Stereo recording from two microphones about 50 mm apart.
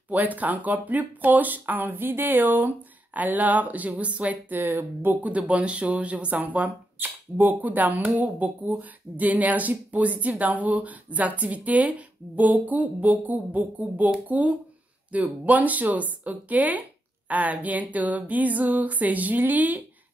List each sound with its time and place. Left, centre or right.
0.1 s speech: right
5.2 s speech: right